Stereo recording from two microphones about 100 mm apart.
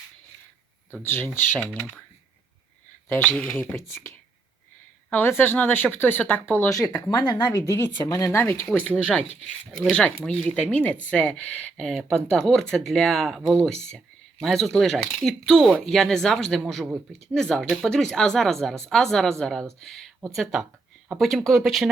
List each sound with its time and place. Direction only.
1.0 s speech: 20° left (ahead or behind)
1.5 s speech: 10° left (ahead or behind)
3.1 s speech: 20° left (ahead or behind)
5.1 s speech: 20° left (ahead or behind)
9.7 s speech: 10° left (ahead or behind)